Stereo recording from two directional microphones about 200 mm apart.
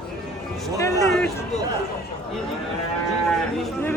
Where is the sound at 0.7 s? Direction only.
15° left (ahead or behind).